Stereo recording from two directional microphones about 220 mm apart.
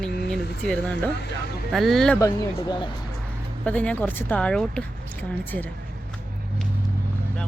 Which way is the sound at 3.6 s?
5° left (ahead or behind).